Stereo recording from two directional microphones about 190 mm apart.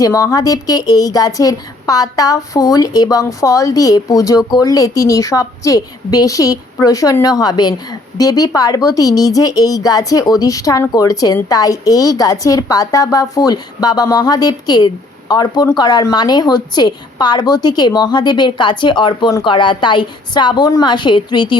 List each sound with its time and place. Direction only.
0.0 s a woman's voice: 20° left (ahead or behind)